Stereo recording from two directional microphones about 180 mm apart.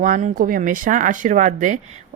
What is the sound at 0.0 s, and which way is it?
Speech, 45° right (ahead or behind).